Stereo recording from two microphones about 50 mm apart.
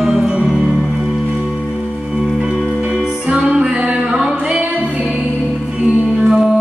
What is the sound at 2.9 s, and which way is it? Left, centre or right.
Music, centre.